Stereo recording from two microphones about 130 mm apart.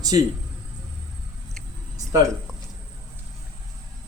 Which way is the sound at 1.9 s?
25° right (ahead or behind).